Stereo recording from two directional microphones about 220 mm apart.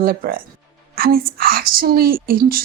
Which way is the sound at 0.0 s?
40° right (ahead or behind).